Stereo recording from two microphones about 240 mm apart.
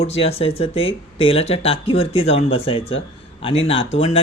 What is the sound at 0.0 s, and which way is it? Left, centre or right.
Speech, left.